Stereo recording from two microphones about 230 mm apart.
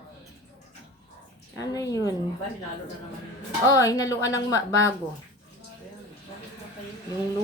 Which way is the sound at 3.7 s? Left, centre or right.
Centre.